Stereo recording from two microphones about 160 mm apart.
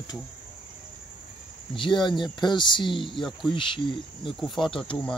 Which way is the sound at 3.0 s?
Centre (ahead or behind).